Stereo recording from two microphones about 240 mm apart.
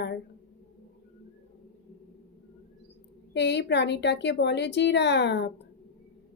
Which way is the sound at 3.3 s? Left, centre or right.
Left.